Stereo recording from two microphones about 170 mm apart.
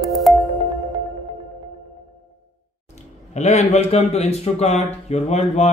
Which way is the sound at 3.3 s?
40° left (ahead or behind).